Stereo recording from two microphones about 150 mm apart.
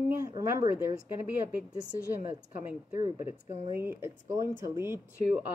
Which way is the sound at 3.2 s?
45° left (ahead or behind).